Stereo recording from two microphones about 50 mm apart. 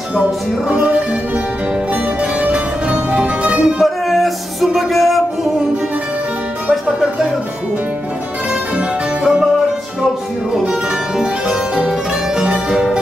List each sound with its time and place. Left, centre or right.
0.2 s music: right
2.4 s music: right
3.8 s music: centre
12.4 s music: centre